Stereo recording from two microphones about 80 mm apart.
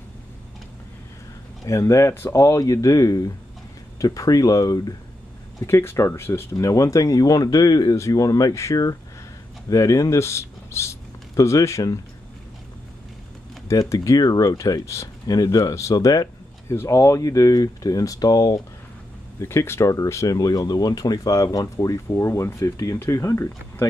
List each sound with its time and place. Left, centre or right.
1.6 s speech: left
5.6 s speech: left
6.6 s speech: left
13.7 s speech: left
15.2 s speech: left
16.6 s speech: left
19.4 s speech: left